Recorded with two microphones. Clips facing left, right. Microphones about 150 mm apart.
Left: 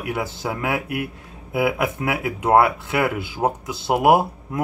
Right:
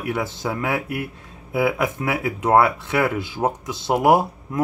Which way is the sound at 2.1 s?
20° left (ahead or behind).